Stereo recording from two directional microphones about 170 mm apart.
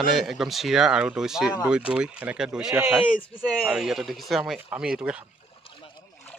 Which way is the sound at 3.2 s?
5° left (ahead or behind).